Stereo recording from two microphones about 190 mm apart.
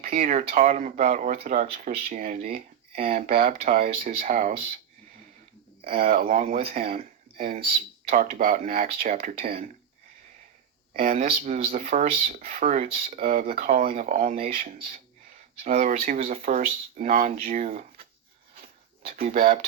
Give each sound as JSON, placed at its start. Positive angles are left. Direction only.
{"t": 0.0, "sound": "speech", "side_deg": -45}
{"t": 5.8, "sound": "speech", "side_deg": -50}
{"t": 10.9, "sound": "speech", "side_deg": -50}
{"t": 18.5, "sound": "a sound", "side_deg": -50}